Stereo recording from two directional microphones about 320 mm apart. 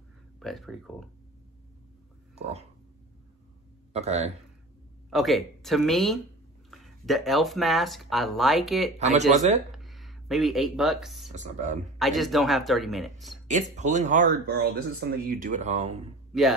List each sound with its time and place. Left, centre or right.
0.4 s speech: centre
2.3 s speech: centre
3.9 s speech: centre
5.1 s speech: centre
8.9 s speech: right
9.7 s speech: centre
11.3 s speech: right
12.0 s speech: centre
13.5 s speech: right
16.3 s speech: centre